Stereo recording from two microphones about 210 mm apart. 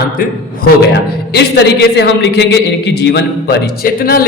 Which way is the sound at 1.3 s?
55° left (ahead or behind).